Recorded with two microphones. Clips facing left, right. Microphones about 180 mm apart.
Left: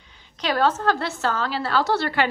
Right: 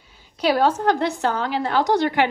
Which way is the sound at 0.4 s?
10° right (ahead or behind).